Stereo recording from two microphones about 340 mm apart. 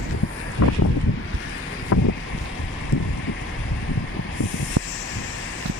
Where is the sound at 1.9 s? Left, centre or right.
Left.